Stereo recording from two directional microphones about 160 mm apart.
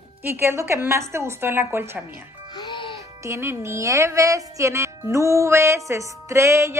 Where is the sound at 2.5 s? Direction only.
30° left (ahead or behind).